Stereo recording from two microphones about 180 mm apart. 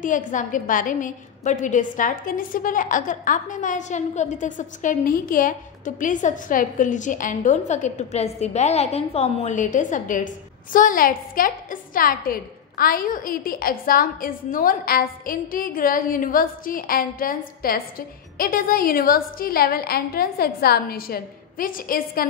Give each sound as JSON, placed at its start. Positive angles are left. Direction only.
{"t": 0.0, "sound": "a woman's voice", "side_deg": 45}